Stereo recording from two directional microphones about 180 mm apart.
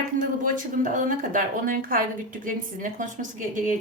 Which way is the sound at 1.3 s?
50° right (ahead or behind).